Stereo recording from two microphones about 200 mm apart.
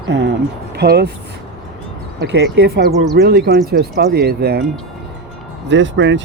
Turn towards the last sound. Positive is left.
turn(degrees=-65)  # may be behind; listen again after turning